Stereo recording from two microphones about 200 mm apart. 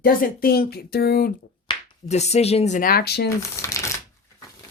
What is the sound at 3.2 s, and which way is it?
Speech, 15° left (ahead or behind).